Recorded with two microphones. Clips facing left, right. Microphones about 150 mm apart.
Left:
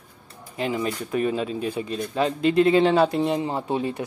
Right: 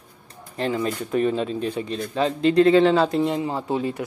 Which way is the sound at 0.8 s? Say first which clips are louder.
Right 2 dB; 35° right (ahead or behind).